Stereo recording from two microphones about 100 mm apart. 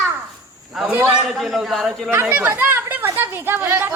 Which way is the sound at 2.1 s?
20° right (ahead or behind).